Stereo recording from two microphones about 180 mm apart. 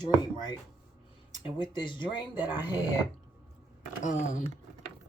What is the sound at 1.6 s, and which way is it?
Speech, 25° left (ahead or behind).